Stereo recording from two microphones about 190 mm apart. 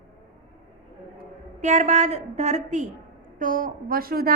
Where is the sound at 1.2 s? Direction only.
40° right (ahead or behind).